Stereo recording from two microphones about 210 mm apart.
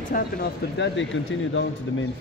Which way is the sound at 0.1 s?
55° left (ahead or behind).